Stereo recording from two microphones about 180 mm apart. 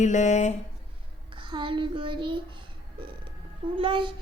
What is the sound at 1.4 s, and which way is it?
A child's voice, 25° right (ahead or behind).